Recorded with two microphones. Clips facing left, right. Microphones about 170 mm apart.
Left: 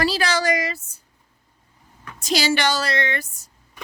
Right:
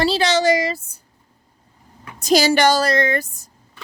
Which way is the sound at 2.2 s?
45° right (ahead or behind).